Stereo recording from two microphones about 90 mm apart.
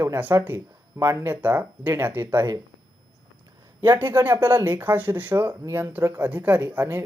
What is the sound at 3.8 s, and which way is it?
Speech, 25° right (ahead or behind).